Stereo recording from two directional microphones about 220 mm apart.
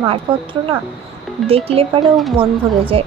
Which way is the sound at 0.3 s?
25° right (ahead or behind).